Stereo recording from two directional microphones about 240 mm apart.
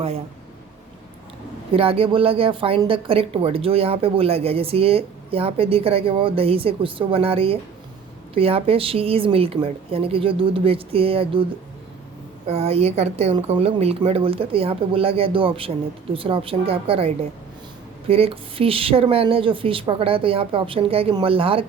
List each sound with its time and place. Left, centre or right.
1.7 s a woman's voice: right
12.5 s a woman's voice: right
18.1 s a woman's voice: right